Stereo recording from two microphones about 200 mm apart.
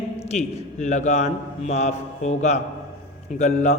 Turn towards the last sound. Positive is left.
turn(degrees=35)  # may be behind; listen again after turning